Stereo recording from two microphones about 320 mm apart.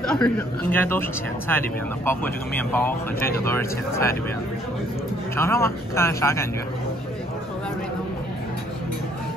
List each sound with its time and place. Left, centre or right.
0.1 s a man's voice: centre
2.0 s speech: centre
5.3 s speech: centre